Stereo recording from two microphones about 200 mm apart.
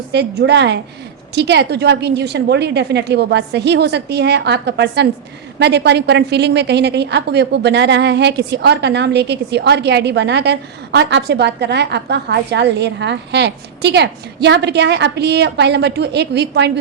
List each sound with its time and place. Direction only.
0.1 s a woman's voice: 55° right (ahead or behind)